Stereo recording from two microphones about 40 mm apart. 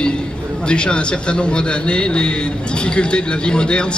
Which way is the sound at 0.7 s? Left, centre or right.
Left.